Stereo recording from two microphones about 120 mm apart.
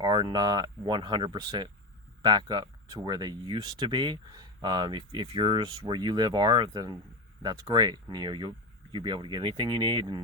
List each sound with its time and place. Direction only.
0.0 s speech: 40° right (ahead or behind)